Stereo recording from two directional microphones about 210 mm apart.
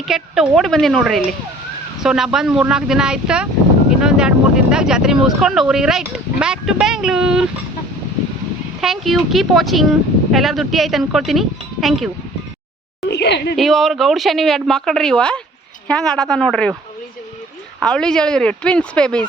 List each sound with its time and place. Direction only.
0.0 s speech: centre (ahead or behind)
8.8 s speech: centre (ahead or behind)
13.1 s speech: 55° left (ahead or behind)
13.6 s speech: centre (ahead or behind)
17.7 s speech: 5° left (ahead or behind)